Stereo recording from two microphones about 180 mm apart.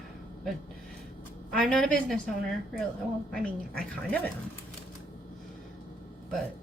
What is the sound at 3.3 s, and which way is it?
Speech, 5° left (ahead or behind).